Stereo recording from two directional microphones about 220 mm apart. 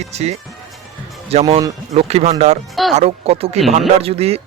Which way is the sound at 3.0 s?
25° right (ahead or behind).